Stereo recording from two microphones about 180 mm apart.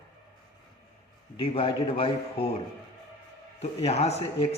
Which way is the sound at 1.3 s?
30° left (ahead or behind).